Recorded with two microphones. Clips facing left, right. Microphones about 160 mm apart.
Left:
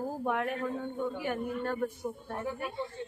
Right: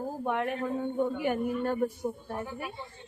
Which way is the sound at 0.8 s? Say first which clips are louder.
Right 5 dB; 20° right (ahead or behind).